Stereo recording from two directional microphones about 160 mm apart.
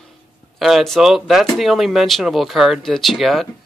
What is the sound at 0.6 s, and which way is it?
Speech, centre (ahead or behind).